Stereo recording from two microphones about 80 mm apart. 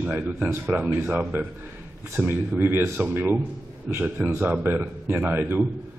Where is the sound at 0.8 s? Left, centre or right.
Right.